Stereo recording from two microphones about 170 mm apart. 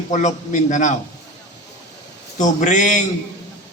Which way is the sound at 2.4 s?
45° left (ahead or behind).